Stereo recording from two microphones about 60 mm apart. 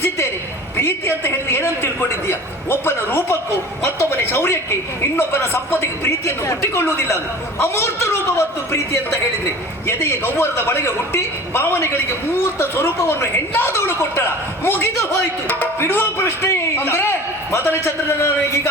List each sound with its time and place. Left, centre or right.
0.8 s a woman's voice: left
7.6 s a man's voice: left
9.8 s a woman's voice: left